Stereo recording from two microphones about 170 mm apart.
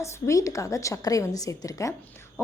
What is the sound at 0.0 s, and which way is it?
A woman's voice, 20° left (ahead or behind).